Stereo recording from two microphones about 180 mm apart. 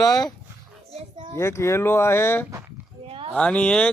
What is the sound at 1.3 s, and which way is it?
Speech, 15° left (ahead or behind).